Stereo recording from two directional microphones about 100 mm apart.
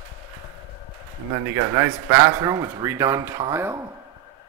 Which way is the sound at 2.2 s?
35° right (ahead or behind).